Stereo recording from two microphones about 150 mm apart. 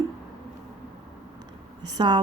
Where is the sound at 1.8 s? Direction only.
30° right (ahead or behind).